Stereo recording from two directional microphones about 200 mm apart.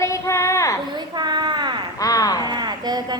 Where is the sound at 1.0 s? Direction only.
20° right (ahead or behind).